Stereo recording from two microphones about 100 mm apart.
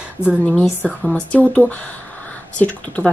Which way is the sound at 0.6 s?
20° left (ahead or behind).